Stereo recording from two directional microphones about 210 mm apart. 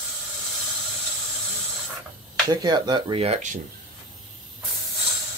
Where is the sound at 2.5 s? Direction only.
20° right (ahead or behind).